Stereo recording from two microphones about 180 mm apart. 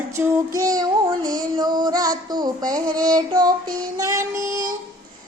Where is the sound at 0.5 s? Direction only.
20° right (ahead or behind).